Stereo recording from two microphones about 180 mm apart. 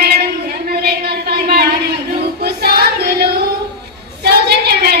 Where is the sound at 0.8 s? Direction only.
65° right (ahead or behind).